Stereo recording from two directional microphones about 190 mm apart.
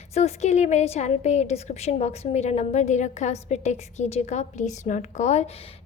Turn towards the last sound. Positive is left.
turn(degrees=40)  # may be behind; listen again after turning